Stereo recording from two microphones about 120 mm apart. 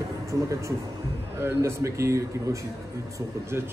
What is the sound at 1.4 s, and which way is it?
A man's voice, 25° right (ahead or behind).